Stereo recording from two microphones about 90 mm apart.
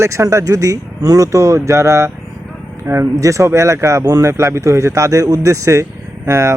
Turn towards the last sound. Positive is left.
turn(degrees=-30)  # may be behind; listen again after turning